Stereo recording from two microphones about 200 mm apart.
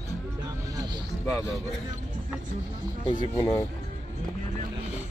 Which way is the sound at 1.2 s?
Centre (ahead or behind).